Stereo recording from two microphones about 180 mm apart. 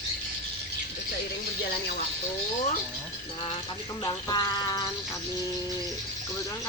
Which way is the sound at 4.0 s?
20° left (ahead or behind).